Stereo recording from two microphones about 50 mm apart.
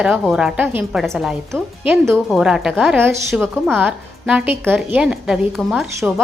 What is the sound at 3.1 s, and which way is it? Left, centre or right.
Speech, right.